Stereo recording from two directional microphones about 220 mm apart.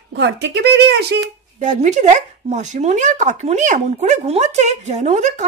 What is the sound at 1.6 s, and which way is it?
Speech, 35° right (ahead or behind).